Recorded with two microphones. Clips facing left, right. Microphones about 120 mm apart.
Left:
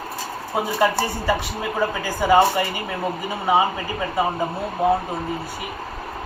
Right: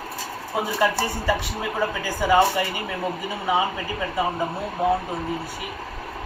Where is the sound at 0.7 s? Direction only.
45° left (ahead or behind).